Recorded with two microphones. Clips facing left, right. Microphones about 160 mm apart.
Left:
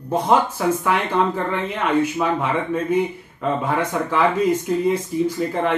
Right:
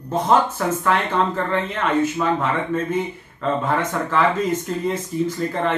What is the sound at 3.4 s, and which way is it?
Speech, 10° left (ahead or behind).